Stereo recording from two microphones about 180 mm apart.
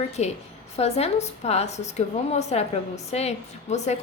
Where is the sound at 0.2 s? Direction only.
35° left (ahead or behind).